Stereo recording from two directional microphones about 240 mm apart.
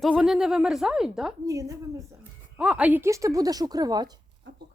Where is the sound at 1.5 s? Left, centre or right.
Centre.